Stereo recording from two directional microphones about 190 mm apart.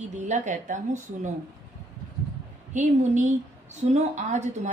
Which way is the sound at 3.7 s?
40° right (ahead or behind).